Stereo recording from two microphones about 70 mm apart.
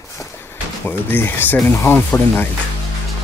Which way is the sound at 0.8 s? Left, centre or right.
Left.